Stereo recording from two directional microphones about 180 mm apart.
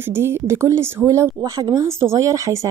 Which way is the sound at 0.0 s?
15° right (ahead or behind).